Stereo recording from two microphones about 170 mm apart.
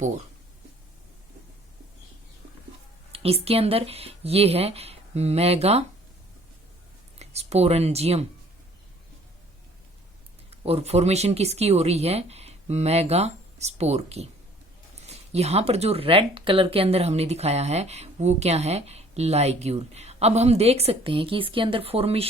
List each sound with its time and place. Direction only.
3.1 s speech: 35° right (ahead or behind)
7.2 s speech: 40° right (ahead or behind)
10.5 s speech: 35° right (ahead or behind)